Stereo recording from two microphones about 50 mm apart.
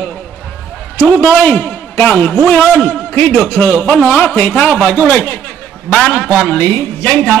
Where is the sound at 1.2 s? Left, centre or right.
Left.